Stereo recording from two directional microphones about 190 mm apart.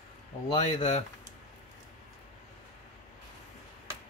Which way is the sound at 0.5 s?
35° left (ahead or behind).